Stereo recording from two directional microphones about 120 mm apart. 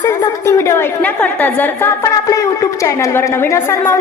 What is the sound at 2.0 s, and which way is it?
A woman's voice, 30° left (ahead or behind).